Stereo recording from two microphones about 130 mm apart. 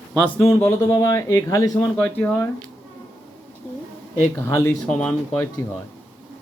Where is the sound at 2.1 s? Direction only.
15° left (ahead or behind).